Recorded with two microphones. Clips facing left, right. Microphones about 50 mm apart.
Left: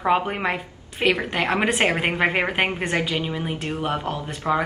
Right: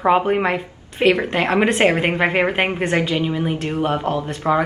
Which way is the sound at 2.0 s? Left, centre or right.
Centre.